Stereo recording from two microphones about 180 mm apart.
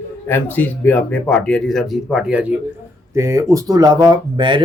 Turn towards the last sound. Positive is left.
turn(degrees=-25)  # may be behind; listen again after turning